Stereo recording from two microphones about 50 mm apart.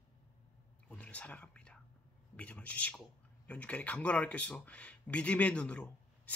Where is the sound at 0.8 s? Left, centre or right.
Left.